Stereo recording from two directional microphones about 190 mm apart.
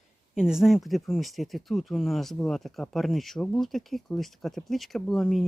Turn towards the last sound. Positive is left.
turn(degrees=0)  # may be behind; listen again after turning